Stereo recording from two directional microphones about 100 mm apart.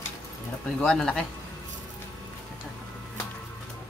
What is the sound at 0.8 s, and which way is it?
Speech, 5° left (ahead or behind).